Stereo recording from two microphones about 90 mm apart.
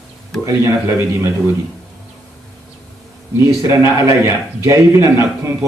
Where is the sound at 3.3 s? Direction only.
30° right (ahead or behind).